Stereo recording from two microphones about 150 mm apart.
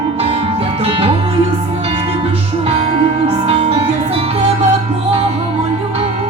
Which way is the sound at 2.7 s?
45° right (ahead or behind).